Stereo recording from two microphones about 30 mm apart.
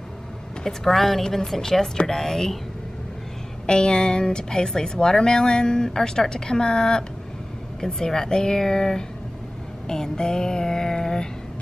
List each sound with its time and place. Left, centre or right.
0.7 s speech: centre
3.6 s speech: left
9.8 s a sound: left